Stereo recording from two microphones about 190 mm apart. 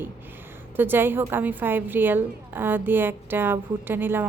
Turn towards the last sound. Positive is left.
turn(degrees=-10)  # may be behind; listen again after turning